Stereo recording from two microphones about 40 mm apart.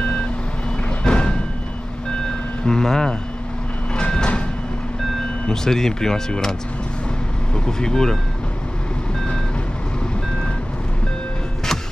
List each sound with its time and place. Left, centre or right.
1.0 s music: left
2.6 s speech: centre
3.9 s vehicle: left
5.5 s speech: centre
7.5 s speech: centre